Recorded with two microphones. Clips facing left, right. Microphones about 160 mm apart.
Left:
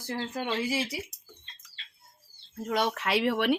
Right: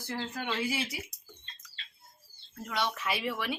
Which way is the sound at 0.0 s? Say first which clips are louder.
Left 3 dB; 35° left (ahead or behind).